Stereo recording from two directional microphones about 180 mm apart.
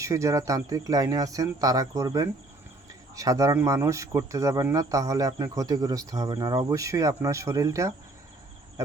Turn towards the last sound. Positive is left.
turn(degrees=-15)  # may be behind; listen again after turning